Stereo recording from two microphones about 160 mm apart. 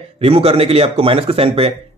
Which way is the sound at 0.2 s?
35° right (ahead or behind).